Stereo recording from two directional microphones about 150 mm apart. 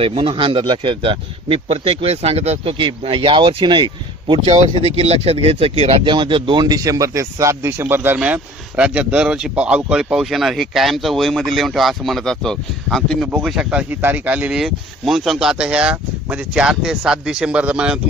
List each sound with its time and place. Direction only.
0.0 s speech: 35° right (ahead or behind)
4.9 s speech: 45° right (ahead or behind); by 18.0 s 5° right (ahead or behind)